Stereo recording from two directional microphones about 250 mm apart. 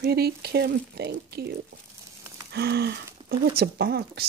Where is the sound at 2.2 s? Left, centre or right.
Centre.